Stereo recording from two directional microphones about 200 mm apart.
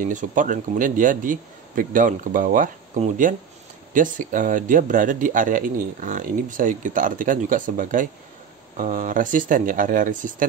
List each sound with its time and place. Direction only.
0.0 s speech: 40° right (ahead or behind)